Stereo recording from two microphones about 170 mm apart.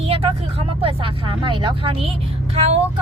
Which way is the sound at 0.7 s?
30° right (ahead or behind).